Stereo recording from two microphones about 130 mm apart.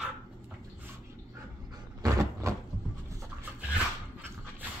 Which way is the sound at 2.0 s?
25° right (ahead or behind).